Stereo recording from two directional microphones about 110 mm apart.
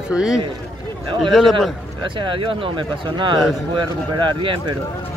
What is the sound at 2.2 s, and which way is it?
Speech, 50° right (ahead or behind).